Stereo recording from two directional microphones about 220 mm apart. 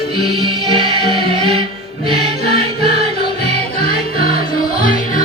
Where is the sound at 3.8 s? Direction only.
40° left (ahead or behind).